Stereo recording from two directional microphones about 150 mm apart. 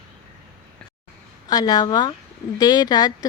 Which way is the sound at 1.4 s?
25° left (ahead or behind).